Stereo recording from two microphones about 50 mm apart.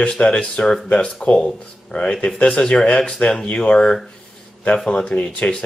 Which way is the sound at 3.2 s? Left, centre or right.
Left.